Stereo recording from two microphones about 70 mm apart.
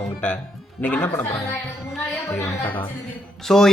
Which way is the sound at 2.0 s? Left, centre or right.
Left.